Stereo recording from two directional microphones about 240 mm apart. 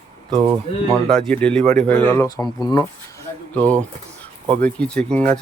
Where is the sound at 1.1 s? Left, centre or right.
Centre.